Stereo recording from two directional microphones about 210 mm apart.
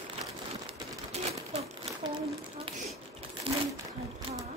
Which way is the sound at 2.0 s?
20° right (ahead or behind).